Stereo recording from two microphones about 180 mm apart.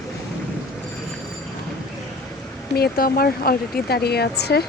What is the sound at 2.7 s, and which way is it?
Speech, 55° left (ahead or behind).